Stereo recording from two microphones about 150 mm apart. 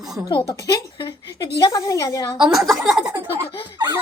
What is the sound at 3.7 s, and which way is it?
Speech, 30° right (ahead or behind).